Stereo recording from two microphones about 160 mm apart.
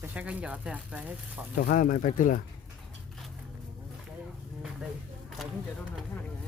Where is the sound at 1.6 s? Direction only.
60° left (ahead or behind).